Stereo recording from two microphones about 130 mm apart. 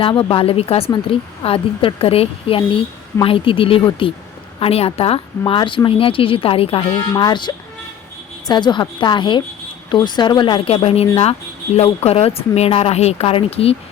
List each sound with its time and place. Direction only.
0.0 s a woman's voice: 40° left (ahead or behind)
7.1 s a woman's voice: 35° left (ahead or behind)